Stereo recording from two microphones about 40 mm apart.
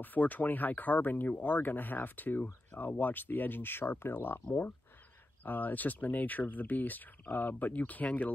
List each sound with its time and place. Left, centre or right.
0.0 s speech: left
5.4 s speech: left